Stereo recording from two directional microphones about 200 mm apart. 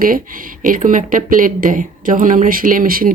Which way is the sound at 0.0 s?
45° right (ahead or behind).